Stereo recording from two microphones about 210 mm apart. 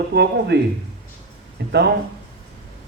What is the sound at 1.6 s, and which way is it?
Speech, 55° right (ahead or behind).